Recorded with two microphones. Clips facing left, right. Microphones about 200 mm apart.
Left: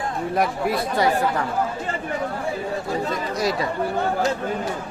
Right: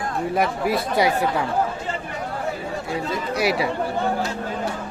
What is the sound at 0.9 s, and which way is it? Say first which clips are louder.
Speech: even; 10° right (ahead or behind).